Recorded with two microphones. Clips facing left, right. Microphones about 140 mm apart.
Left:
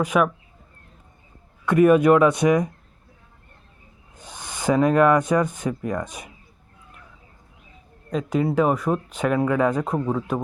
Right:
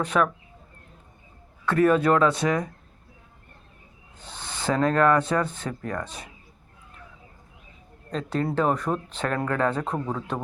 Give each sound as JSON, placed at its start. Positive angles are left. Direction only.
{"t": 0.0, "sound": "speech", "side_deg": 10}
{"t": 1.6, "sound": "speech", "side_deg": 15}
{"t": 4.2, "sound": "speech", "side_deg": 15}
{"t": 8.1, "sound": "speech", "side_deg": 10}